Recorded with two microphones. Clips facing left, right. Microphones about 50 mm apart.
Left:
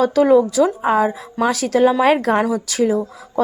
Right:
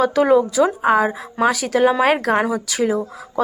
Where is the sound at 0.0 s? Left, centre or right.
Right.